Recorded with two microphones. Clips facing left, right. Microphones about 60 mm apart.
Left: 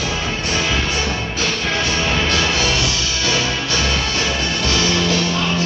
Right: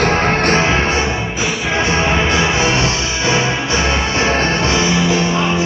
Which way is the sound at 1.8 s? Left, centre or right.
Right.